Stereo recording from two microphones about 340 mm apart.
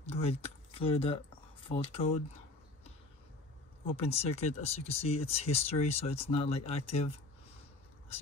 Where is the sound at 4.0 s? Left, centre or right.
Centre.